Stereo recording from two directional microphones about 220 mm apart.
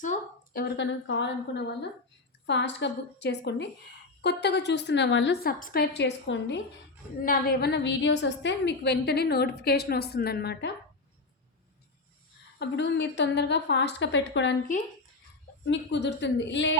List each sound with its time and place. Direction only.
0.0 s a woman's voice: 40° left (ahead or behind)
7.2 s a woman's voice: 40° left (ahead or behind)
12.5 s a woman's voice: 55° left (ahead or behind)
15.6 s a woman's voice: 55° left (ahead or behind)